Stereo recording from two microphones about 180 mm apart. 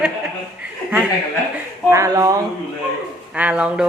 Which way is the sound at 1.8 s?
15° right (ahead or behind).